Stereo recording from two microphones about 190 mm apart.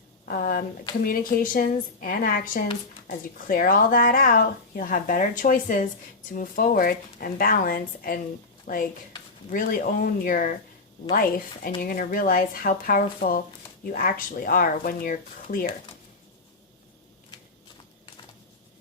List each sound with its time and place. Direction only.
0.3 s speech: 50° left (ahead or behind)